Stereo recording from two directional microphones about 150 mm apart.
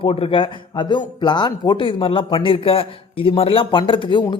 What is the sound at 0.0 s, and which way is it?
Speech, 40° left (ahead or behind).